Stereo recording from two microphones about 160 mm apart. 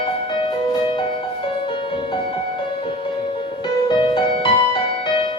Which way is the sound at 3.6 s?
30° left (ahead or behind).